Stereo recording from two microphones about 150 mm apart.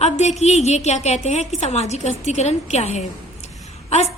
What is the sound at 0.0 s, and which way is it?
A woman's voice, 50° left (ahead or behind).